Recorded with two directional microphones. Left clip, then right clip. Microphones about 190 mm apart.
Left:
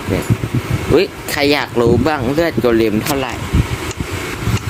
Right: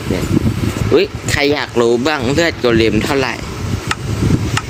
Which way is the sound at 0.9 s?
10° left (ahead or behind).